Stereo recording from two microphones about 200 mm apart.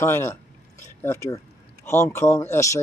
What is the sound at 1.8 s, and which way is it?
Speech, 10° left (ahead or behind).